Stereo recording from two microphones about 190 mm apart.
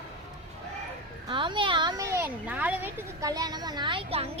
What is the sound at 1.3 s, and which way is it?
A child's voice, 25° right (ahead or behind).